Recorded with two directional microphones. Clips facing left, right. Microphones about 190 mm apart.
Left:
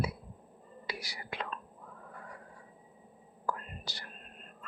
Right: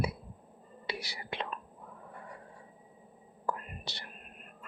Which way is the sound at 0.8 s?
25° right (ahead or behind).